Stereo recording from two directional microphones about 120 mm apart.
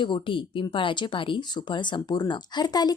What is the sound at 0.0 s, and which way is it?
Speech, 45° left (ahead or behind).